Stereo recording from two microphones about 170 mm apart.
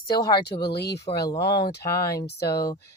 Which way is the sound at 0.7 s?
75° left (ahead or behind).